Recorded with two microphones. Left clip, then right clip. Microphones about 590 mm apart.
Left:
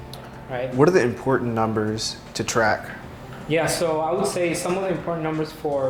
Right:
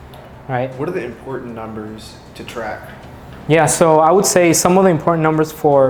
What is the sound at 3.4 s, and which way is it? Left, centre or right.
Speech, right.